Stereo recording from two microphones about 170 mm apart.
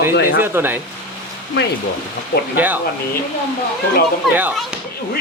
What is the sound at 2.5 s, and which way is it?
Speech, 10° right (ahead or behind).